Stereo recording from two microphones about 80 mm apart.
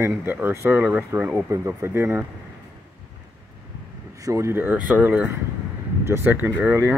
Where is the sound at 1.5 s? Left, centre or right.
Right.